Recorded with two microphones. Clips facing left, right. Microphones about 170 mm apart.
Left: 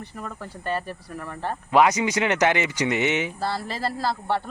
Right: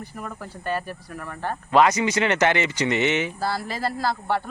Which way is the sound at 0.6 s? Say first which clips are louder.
Even; 30° left (ahead or behind).